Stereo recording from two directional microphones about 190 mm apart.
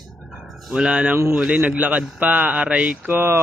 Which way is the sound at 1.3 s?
5° right (ahead or behind).